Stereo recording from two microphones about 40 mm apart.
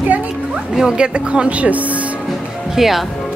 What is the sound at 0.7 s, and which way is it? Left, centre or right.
Speech, centre.